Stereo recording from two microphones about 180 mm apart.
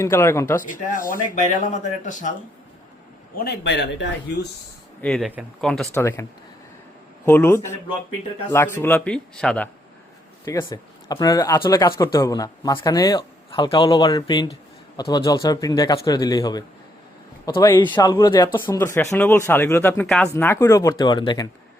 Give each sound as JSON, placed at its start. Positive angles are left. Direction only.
{"t": 0.0, "sound": "speech", "side_deg": 15}
{"t": 0.6, "sound": "speech", "side_deg": 50}
{"t": 3.3, "sound": "speech", "side_deg": 65}
{"t": 5.0, "sound": "speech", "side_deg": 5}
{"t": 5.9, "sound": "speech", "side_deg": 15}
{"t": 7.3, "sound": "speech", "side_deg": 10}
{"t": 10.4, "sound": "a man's voice", "side_deg": 20}